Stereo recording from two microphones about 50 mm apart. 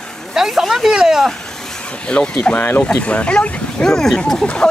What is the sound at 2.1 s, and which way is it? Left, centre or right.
Speech, left.